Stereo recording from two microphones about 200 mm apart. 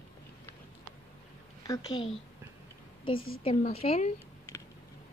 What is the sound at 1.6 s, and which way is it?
Speech, 20° left (ahead or behind).